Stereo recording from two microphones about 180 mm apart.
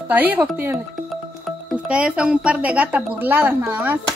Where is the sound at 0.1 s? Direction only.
10° right (ahead or behind).